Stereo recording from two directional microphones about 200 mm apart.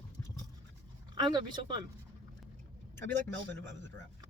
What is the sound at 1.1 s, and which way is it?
Speech, 20° right (ahead or behind).